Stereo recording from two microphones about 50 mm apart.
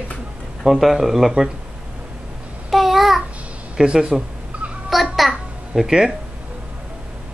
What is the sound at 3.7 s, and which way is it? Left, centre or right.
Speech, centre.